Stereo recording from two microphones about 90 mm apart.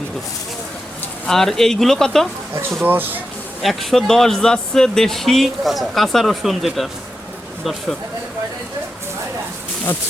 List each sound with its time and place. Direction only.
1.3 s speech: 5° left (ahead or behind)
2.6 s speech: 25° right (ahead or behind)
3.6 s speech: centre (ahead or behind)